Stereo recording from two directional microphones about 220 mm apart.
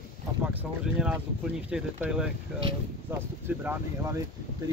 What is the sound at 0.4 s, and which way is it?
Speech, 10° right (ahead or behind).